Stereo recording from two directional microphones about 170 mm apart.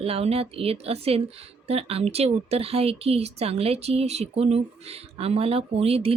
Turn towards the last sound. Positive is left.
turn(degrees=-35)  # may be behind; listen again after turning